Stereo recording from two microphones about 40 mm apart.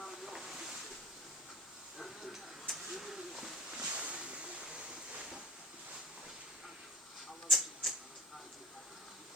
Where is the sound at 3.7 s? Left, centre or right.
Right.